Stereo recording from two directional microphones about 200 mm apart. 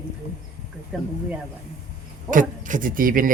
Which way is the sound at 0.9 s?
5° right (ahead or behind).